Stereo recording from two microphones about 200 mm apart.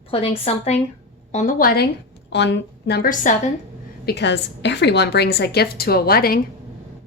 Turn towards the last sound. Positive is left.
turn(degrees=50)  # may be behind; listen again after turning